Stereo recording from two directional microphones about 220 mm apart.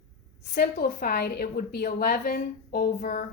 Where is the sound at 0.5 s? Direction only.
45° left (ahead or behind).